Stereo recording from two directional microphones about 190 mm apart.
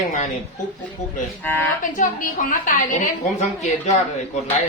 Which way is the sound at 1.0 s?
40° left (ahead or behind).